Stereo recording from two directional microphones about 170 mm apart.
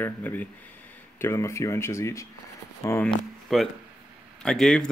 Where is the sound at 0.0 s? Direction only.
10° left (ahead or behind).